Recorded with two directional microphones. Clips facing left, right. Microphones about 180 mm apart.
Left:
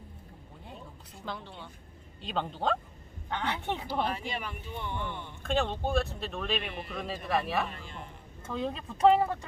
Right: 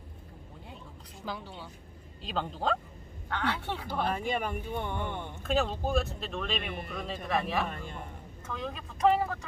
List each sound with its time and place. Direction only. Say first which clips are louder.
1.2 s speech: right 1 dB; 5° right (ahead or behind)
3.2 s speech: even; 20° left (ahead or behind)
3.8 s speech: right 4 dB; 50° right (ahead or behind)
5.4 s speech: even; 5° right (ahead or behind)
8.5 s speech: left 5 dB; 30° left (ahead or behind)